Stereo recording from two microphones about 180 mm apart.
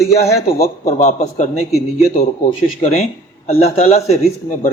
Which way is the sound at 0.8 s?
35° left (ahead or behind).